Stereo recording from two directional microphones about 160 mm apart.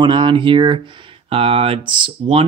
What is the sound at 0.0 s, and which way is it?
Speech, 30° right (ahead or behind).